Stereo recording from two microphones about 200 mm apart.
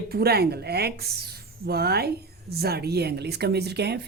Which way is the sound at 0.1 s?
50° right (ahead or behind).